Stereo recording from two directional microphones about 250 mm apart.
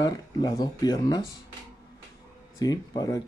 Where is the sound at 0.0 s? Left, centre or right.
Centre.